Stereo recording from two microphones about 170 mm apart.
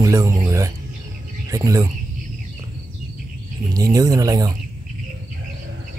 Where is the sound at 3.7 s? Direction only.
20° right (ahead or behind).